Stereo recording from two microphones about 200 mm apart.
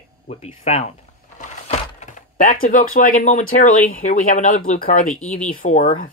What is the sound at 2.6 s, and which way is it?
Speech, 45° left (ahead or behind).